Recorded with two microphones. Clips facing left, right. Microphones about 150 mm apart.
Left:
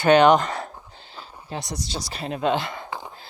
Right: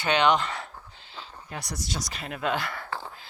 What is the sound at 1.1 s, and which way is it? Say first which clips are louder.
Speech: left 5 dB; 25° left (ahead or behind).